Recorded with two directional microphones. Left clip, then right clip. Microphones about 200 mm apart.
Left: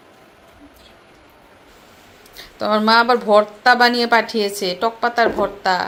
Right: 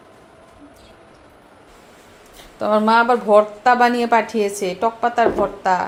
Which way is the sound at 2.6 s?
Centre (ahead or behind).